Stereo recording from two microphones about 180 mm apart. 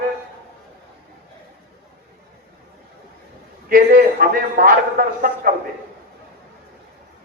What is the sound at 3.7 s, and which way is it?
A man's voice, 50° right (ahead or behind).